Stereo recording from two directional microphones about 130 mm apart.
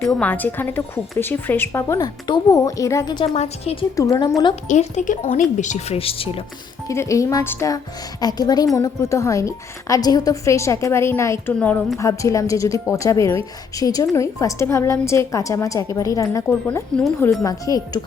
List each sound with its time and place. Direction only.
0.0 s speech: 5° left (ahead or behind)
0.3 s a woman's voice: 15° left (ahead or behind); by 3.2 s 30° left (ahead or behind)
3.3 s a woman's voice: 55° left (ahead or behind)
3.9 s a woman's voice: 25° left (ahead or behind)
4.7 s speech: 70° left (ahead or behind)
6.0 s a woman's voice: 45° left (ahead or behind)
6.8 s a woman's voice: 20° left (ahead or behind)
8.2 s a woman's voice: 30° left (ahead or behind)
17.4 s a woman's voice: 30° left (ahead or behind)